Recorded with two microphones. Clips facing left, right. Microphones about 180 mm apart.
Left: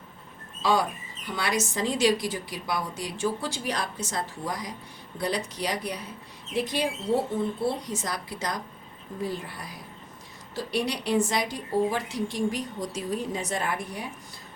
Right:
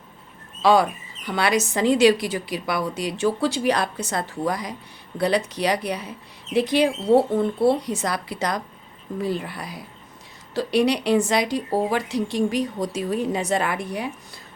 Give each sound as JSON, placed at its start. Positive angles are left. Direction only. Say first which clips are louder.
{"t": 0.6, "sound": "speech", "louder": "right 7 dB", "side_deg": -70}